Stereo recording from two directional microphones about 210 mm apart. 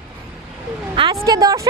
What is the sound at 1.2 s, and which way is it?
Speech, 15° right (ahead or behind).